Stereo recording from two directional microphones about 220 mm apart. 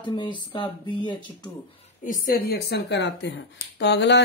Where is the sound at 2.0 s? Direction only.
40° left (ahead or behind).